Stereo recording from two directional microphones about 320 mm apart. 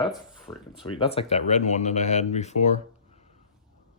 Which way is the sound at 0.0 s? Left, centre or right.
Centre.